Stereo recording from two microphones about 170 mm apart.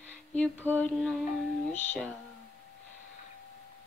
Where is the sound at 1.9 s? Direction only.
10° left (ahead or behind).